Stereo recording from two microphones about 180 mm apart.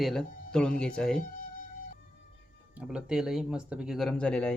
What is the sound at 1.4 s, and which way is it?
Music, 50° left (ahead or behind).